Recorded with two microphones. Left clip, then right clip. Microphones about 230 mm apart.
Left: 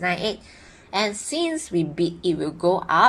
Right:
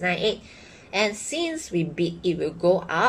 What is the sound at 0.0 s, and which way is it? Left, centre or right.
A woman's voice, left.